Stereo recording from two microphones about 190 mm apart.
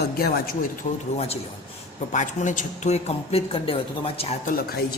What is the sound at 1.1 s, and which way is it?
A woman's voice, 35° left (ahead or behind).